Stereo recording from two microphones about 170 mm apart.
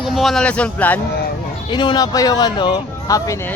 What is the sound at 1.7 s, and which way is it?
Speech, 25° left (ahead or behind).